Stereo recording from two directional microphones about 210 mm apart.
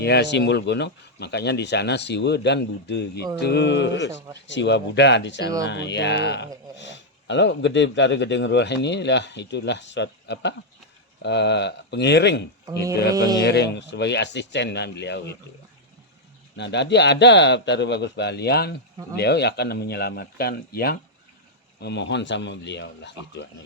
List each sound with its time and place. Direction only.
0.0 s speech: 55° left (ahead or behind)
16.6 s speech: 55° left (ahead or behind)